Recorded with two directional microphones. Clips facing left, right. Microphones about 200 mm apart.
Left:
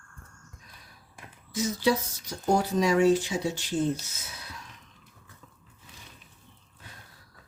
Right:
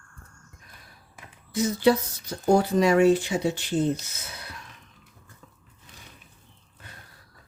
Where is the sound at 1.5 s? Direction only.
60° right (ahead or behind).